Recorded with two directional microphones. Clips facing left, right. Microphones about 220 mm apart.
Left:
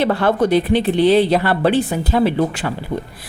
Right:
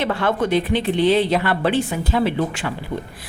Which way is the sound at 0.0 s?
35° left (ahead or behind).